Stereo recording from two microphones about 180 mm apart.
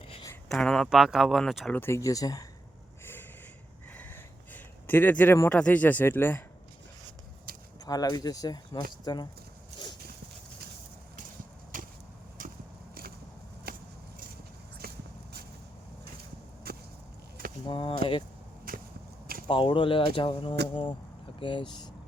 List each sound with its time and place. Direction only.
0.4 s speech: 5° left (ahead or behind)
1.8 s speech: 15° left (ahead or behind)
3.9 s a sound: 10° left (ahead or behind)
7.5 s keys jangling: 55° right (ahead or behind)
7.9 s speech: 20° left (ahead or behind)
11.7 s a sound: 45° right (ahead or behind)
17.7 s speech: 30° left (ahead or behind)
18.7 s a sound: 55° right (ahead or behind)
19.5 s speech: 30° left (ahead or behind)